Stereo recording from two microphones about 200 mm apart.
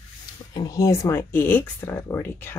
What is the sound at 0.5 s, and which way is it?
Speech, 15° left (ahead or behind).